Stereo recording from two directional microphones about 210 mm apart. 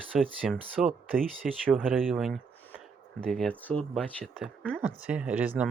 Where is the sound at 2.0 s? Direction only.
Centre (ahead or behind).